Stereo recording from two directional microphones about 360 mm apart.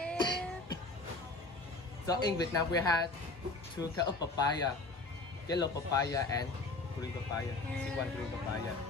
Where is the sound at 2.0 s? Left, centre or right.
Centre.